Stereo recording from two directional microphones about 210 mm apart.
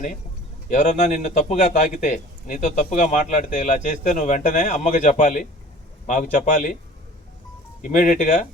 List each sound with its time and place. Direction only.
0.7 s a man's voice: 35° left (ahead or behind)
7.8 s a man's voice: 40° left (ahead or behind)